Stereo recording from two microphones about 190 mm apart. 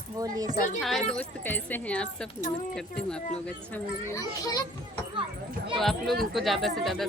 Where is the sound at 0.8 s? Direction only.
Centre (ahead or behind).